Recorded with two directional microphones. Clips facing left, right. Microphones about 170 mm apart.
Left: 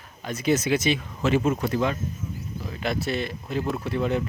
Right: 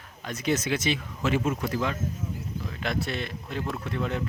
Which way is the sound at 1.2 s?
30° left (ahead or behind).